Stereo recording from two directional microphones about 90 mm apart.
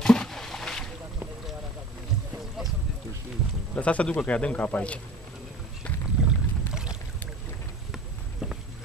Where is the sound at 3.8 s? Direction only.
15° left (ahead or behind).